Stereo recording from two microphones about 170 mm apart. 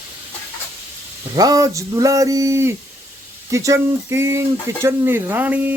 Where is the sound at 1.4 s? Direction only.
20° right (ahead or behind).